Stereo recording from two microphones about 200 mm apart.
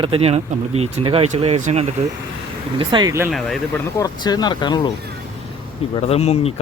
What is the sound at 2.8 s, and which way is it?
Speech, 20° right (ahead or behind).